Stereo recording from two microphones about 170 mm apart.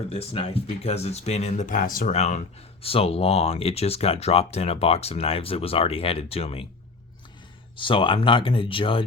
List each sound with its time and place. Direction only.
0.1 s speech: 35° left (ahead or behind)
7.8 s speech: 30° left (ahead or behind)